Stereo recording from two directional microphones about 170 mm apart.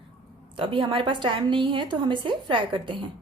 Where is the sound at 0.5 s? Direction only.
30° right (ahead or behind).